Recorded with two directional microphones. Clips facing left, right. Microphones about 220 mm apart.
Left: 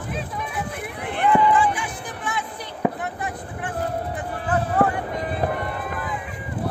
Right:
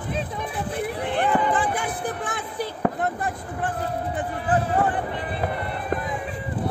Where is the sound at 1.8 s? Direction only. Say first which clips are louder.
Right 4 dB; 50° right (ahead or behind).